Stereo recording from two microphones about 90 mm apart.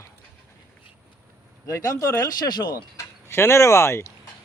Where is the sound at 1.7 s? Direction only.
35° left (ahead or behind); by 2.9 s 55° left (ahead or behind).